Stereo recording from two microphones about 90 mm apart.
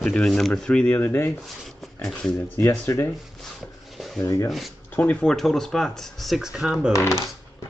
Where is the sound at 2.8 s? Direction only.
30° left (ahead or behind).